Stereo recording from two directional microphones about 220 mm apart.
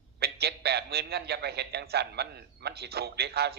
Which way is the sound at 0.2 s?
45° right (ahead or behind).